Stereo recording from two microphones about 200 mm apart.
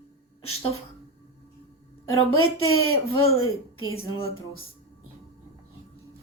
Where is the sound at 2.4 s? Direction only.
90° left.